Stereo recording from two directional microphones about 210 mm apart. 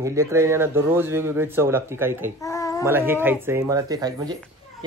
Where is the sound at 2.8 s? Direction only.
10° right (ahead or behind).